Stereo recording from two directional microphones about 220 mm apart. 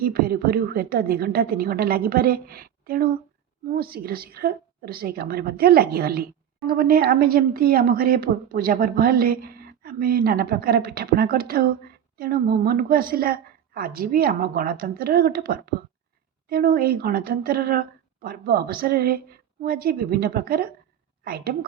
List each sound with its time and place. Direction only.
0.0 s a woman's voice: 40° right (ahead or behind)